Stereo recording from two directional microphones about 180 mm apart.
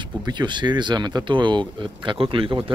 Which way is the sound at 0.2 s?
25° right (ahead or behind).